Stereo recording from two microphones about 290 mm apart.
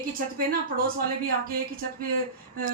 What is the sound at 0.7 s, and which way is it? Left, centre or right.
Speech, right.